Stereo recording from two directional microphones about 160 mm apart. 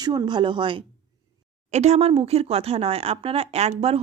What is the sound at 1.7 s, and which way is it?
Speech, 45° right (ahead or behind).